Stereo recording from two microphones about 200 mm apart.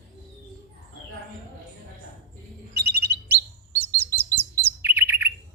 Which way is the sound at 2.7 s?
55° right (ahead or behind).